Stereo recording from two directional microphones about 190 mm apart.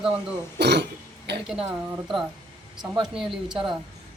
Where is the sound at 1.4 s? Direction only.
5° right (ahead or behind).